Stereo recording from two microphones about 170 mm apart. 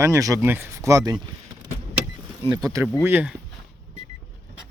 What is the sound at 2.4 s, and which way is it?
Speech, 25° right (ahead or behind).